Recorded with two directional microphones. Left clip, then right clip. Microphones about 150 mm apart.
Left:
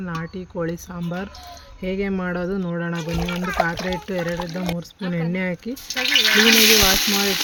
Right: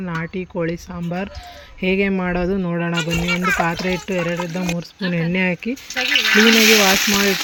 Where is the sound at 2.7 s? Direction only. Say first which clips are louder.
Right 4 dB; 15° right (ahead or behind).